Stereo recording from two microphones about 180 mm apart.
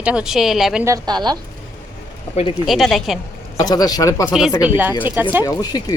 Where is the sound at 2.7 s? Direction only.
Centre (ahead or behind).